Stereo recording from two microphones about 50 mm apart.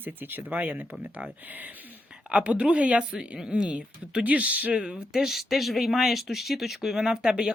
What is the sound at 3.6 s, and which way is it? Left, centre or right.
Speech, right.